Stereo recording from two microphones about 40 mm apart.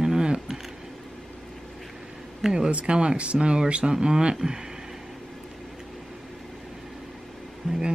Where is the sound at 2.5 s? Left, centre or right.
Right.